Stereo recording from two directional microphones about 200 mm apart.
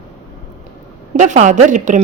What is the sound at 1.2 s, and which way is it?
Speech, 40° right (ahead or behind).